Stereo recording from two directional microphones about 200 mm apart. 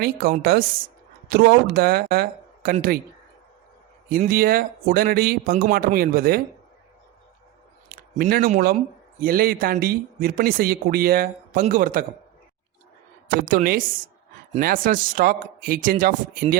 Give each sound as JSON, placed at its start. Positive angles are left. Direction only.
{"t": 0.0, "sound": "speech", "side_deg": -45}
{"t": 4.1, "sound": "speech", "side_deg": -45}
{"t": 7.9, "sound": "speech", "side_deg": -50}
{"t": 13.2, "sound": "speech", "side_deg": -45}